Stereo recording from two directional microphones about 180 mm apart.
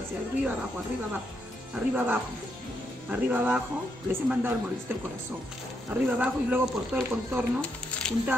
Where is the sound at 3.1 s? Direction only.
10° right (ahead or behind).